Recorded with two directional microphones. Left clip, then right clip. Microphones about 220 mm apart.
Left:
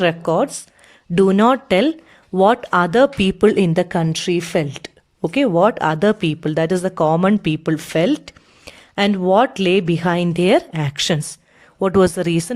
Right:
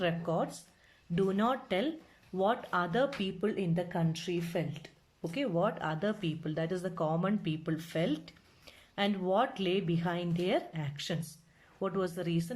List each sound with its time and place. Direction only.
0.0 s speech: 45° left (ahead or behind)